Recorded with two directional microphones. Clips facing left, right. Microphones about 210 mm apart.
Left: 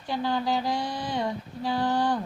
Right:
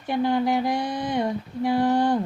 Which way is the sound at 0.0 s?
20° right (ahead or behind).